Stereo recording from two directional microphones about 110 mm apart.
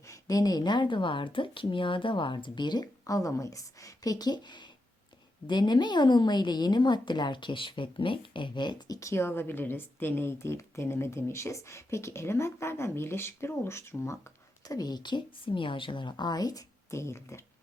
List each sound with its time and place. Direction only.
0.0 s a woman's voice: 30° left (ahead or behind)
9.0 s a woman's voice: 25° left (ahead or behind)